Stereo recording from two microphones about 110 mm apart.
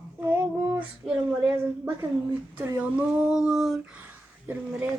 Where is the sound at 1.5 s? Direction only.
10° right (ahead or behind).